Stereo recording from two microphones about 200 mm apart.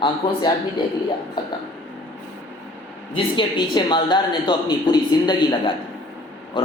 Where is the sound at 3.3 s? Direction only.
25° left (ahead or behind).